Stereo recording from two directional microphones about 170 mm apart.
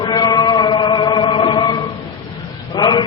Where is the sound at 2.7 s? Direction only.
25° left (ahead or behind).